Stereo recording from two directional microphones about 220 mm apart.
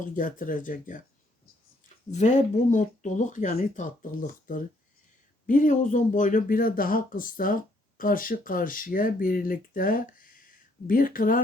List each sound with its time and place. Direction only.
0.0 s speech: 35° left (ahead or behind)
2.0 s speech: 35° left (ahead or behind)